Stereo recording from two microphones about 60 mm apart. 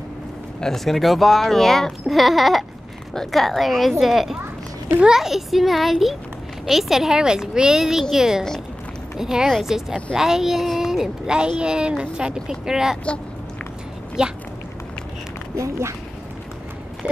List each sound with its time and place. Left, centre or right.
0.6 s speech: centre
14.2 s speech: centre
15.5 s speech: right